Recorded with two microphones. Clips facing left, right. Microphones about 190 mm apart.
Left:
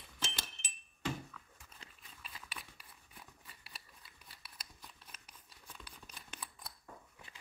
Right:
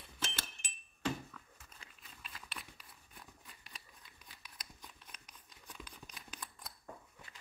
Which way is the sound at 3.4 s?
5° left (ahead or behind).